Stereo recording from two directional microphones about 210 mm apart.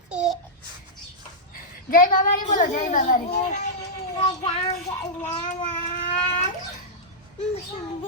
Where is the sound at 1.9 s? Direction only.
40° left (ahead or behind).